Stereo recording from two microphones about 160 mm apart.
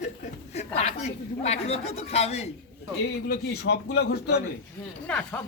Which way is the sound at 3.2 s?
85° left.